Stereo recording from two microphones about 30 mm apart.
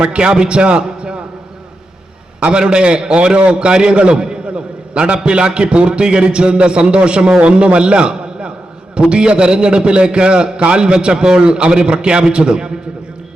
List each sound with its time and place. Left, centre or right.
0.0 s a man's voice: right
2.5 s a man's voice: right